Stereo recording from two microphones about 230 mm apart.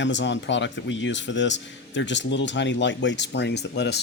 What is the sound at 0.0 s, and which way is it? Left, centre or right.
Speech, left.